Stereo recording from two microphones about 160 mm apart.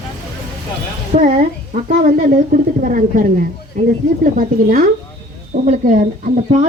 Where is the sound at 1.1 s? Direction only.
55° right (ahead or behind).